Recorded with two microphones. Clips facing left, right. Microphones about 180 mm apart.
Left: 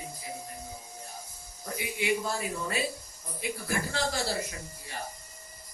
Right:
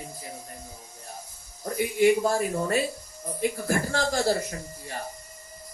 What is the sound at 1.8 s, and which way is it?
Speech, 45° right (ahead or behind).